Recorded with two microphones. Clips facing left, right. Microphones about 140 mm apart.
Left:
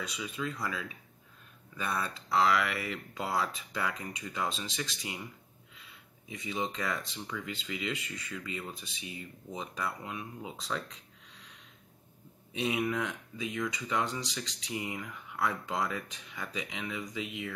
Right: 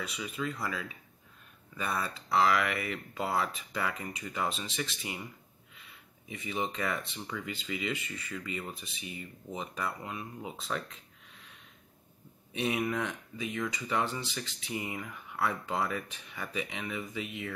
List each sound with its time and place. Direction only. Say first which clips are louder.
0.0 s speech: right 1 dB; centre (ahead or behind)
6.4 s speech: right 1 dB; 5° right (ahead or behind)
12.6 s speech: even; centre (ahead or behind)